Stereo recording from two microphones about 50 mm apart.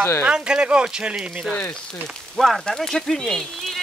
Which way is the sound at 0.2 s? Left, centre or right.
Centre.